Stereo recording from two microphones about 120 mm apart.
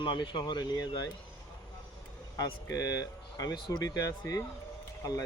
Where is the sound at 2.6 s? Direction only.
30° left (ahead or behind).